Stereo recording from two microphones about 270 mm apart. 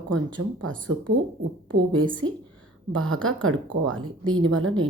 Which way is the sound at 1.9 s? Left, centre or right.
Centre.